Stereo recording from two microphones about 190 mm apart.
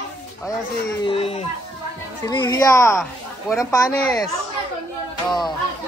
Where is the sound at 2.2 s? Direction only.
20° left (ahead or behind).